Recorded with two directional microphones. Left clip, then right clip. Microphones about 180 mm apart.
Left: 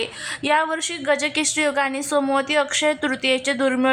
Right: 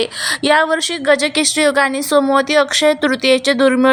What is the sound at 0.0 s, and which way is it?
A woman's voice, 25° right (ahead or behind).